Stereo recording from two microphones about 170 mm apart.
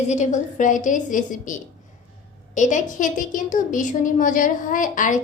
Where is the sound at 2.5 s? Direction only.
45° left (ahead or behind).